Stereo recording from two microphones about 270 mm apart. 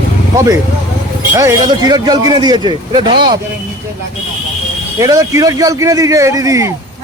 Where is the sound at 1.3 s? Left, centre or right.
Centre.